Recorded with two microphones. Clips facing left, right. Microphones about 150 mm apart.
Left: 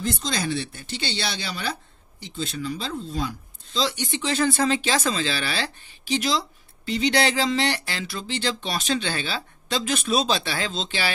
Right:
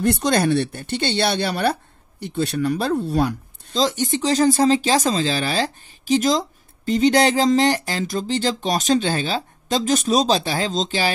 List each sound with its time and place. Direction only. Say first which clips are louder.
0.0 s speech: right 9 dB; 65° right (ahead or behind)
3.7 s speech: right 6 dB; 45° right (ahead or behind)